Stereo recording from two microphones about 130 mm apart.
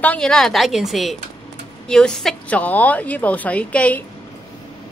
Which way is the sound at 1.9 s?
5° left (ahead or behind).